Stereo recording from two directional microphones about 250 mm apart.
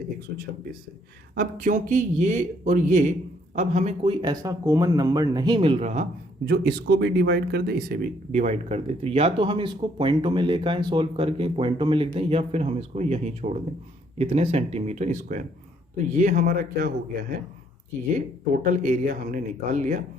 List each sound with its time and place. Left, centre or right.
0.3 s speech: right
18.1 s speech: right